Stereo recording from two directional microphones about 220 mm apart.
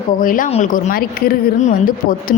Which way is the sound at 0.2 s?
40° left (ahead or behind).